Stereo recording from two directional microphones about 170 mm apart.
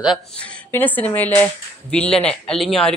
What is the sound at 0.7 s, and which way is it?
Speech, 10° left (ahead or behind).